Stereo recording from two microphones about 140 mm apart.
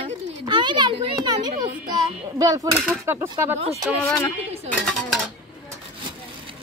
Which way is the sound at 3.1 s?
15° right (ahead or behind).